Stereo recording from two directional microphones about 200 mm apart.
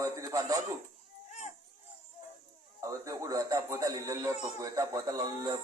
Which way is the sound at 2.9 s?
15° right (ahead or behind).